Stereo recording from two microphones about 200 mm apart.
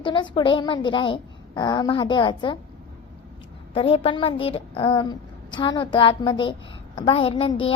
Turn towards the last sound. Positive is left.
turn(degrees=25)  # may be behind; listen again after turning